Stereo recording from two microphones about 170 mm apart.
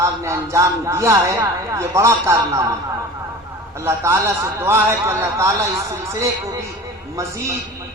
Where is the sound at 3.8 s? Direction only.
15° right (ahead or behind).